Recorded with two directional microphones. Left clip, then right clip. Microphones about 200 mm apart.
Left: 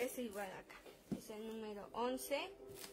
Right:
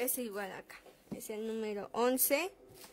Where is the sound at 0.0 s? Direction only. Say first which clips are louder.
Right 5 dB; 50° right (ahead or behind).